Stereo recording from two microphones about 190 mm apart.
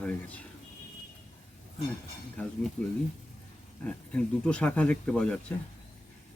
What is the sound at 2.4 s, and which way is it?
Speech, 5° left (ahead or behind).